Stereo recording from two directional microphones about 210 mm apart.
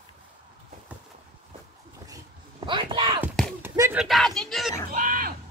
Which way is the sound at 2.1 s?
20° right (ahead or behind).